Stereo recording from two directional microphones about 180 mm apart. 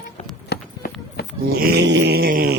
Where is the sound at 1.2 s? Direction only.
60° left (ahead or behind).